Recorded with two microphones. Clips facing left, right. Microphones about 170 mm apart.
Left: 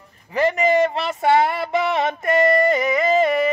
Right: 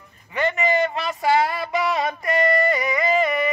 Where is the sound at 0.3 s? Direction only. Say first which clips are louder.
Left 4 dB; 35° left (ahead or behind).